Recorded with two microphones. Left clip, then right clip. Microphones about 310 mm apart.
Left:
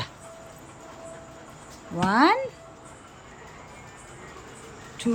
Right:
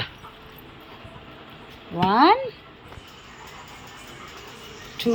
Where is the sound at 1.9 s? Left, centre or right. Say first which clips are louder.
Right 4 dB; centre.